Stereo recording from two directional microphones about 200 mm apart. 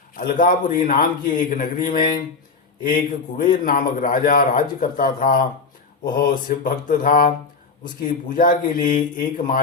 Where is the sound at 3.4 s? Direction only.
45° left (ahead or behind).